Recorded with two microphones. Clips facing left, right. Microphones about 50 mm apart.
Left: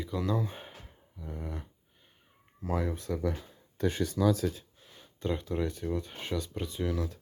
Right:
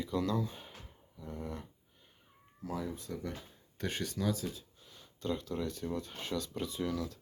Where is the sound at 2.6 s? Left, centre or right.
Left.